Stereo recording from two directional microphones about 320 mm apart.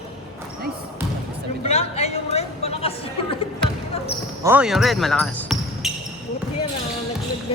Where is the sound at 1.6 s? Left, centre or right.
Centre.